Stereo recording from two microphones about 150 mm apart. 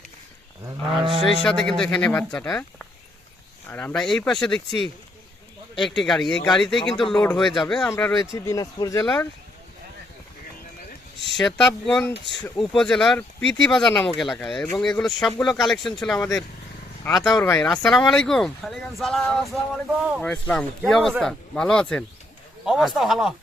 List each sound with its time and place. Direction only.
0.9 s speech: 35° right (ahead or behind)
1.2 s speech: 5° left (ahead or behind)
3.7 s speech: 10° left (ahead or behind)
7.9 s speech: 20° left (ahead or behind)
11.3 s speech: 5° left (ahead or behind)